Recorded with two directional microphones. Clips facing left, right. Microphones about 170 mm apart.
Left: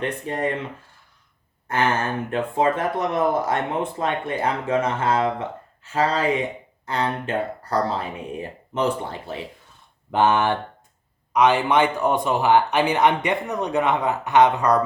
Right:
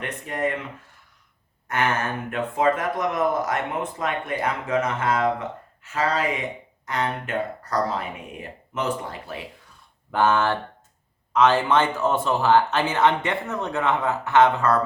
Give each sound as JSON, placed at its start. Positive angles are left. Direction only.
{"t": 0.0, "sound": "speech", "side_deg": 30}
{"t": 1.6, "sound": "gasp", "side_deg": 30}
{"t": 2.3, "sound": "speech", "side_deg": 30}